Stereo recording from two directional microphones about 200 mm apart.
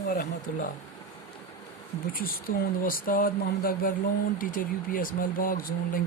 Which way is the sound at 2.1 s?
45° left (ahead or behind).